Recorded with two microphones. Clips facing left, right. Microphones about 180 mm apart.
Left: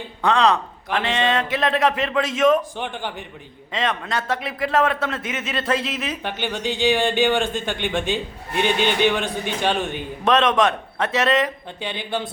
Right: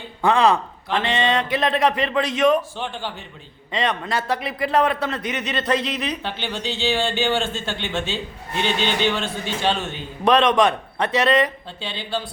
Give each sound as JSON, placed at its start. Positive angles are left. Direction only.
{"t": 0.2, "sound": "a man's voice", "side_deg": -5}
{"t": 2.7, "sound": "a man's voice", "side_deg": 15}
{"t": 3.7, "sound": "a man's voice", "side_deg": 0}
{"t": 10.2, "sound": "a man's voice", "side_deg": 0}
{"t": 11.8, "sound": "a man's voice", "side_deg": 15}